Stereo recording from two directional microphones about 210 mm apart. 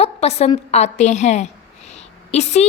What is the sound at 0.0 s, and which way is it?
A woman's voice, 30° left (ahead or behind).